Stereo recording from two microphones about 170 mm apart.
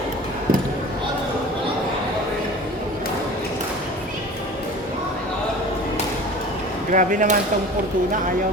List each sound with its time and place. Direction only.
6.9 s speech: 50° right (ahead or behind)